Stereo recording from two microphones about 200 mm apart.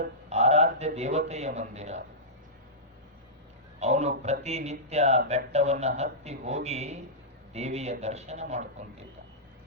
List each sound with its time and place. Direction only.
0.3 s a man's voice: 35° right (ahead or behind)
3.8 s speech: 35° right (ahead or behind)